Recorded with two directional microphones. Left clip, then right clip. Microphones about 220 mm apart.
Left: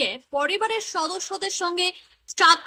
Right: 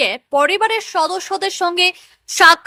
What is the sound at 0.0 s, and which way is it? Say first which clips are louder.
A woman's voice: right 9 dB; 25° right (ahead or behind).